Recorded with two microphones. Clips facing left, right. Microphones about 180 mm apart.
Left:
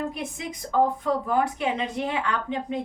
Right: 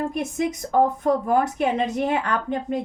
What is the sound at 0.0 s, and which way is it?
A woman's voice, 45° right (ahead or behind).